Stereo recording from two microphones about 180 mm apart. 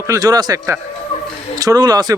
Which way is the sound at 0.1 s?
20° right (ahead or behind).